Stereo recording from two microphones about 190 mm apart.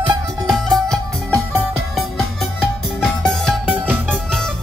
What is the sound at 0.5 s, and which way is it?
Music, centre (ahead or behind).